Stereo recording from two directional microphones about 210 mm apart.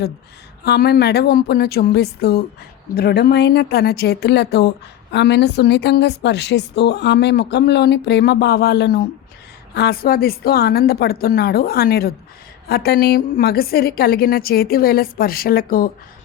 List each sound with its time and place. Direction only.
0.6 s a woman's voice: 50° left (ahead or behind)